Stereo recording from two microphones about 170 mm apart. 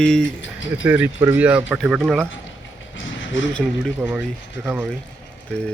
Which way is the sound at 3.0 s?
90° left.